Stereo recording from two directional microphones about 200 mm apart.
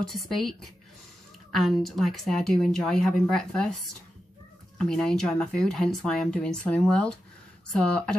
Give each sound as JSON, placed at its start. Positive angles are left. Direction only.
{"t": 0.2, "sound": "speech", "side_deg": 0}
{"t": 4.7, "sound": "speech", "side_deg": 5}